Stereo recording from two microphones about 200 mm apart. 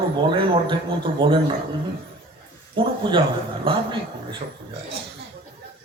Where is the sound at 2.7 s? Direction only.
25° right (ahead or behind).